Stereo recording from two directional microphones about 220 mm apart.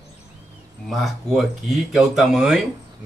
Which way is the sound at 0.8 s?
Centre (ahead or behind).